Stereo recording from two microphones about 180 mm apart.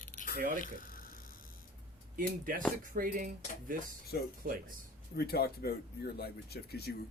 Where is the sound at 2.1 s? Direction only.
50° right (ahead or behind).